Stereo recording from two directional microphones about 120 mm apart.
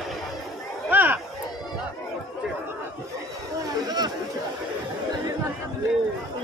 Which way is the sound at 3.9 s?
35° right (ahead or behind).